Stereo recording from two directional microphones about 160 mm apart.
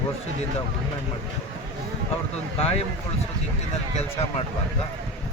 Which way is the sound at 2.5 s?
40° left (ahead or behind).